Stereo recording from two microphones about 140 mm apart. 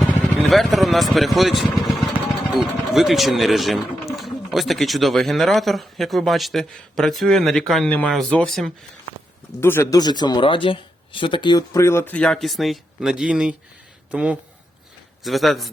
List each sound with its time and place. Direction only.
0.5 s speech: centre (ahead or behind)
9.6 s speech: 15° left (ahead or behind); by 15.7 s centre (ahead or behind)